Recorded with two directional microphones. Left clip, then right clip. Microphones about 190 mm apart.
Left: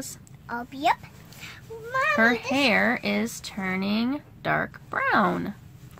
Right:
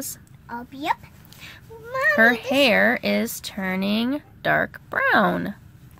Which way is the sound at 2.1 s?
35° right (ahead or behind).